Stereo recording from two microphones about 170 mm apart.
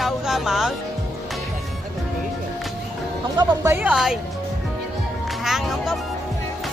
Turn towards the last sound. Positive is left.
turn(degrees=0)  # may be behind; listen again after turning